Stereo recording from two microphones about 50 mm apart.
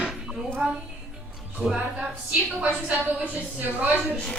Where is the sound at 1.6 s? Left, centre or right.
Centre.